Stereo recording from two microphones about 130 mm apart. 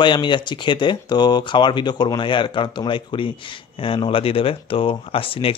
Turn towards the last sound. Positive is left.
turn(degrees=45)  # may be behind; listen again after turning